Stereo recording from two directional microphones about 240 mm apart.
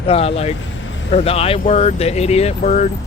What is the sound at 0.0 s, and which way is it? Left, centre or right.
Speech, left.